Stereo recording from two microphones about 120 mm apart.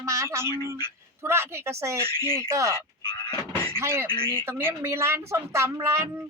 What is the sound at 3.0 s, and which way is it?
Music, 35° left (ahead or behind).